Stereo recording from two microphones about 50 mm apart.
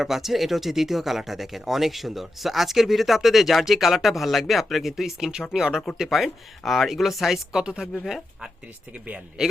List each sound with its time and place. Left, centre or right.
0.0 s speech: centre